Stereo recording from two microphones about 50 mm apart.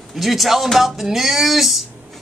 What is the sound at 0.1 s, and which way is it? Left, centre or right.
Speech, centre.